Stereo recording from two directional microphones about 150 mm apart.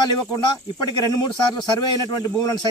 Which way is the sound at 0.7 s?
25° left (ahead or behind).